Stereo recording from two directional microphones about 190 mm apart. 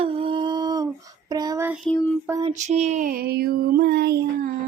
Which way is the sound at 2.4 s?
35° right (ahead or behind).